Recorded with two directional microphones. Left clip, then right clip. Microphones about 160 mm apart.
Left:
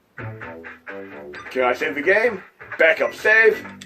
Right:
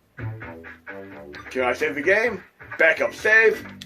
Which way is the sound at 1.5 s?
25° left (ahead or behind).